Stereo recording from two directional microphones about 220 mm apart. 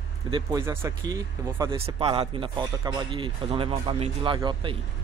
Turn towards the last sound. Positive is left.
turn(degrees=-20)  # may be behind; listen again after turning